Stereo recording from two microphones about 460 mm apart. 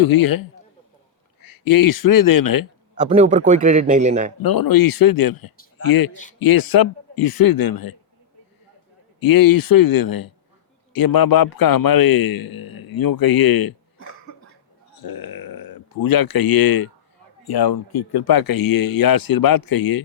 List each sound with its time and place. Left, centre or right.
0.1 s a man's voice: left
1.5 s a man's voice: left
3.0 s a man's voice: centre
4.4 s a man's voice: left
9.2 s a man's voice: left
14.9 s a man's voice: left